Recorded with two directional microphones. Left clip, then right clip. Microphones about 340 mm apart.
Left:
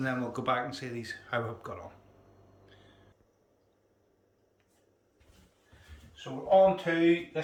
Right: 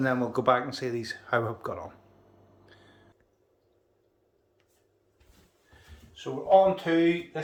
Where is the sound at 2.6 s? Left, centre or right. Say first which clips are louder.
Right 3 dB; centre.